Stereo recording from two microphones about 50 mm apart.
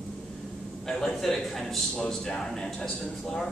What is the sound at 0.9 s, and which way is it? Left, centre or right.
A man's voice, centre.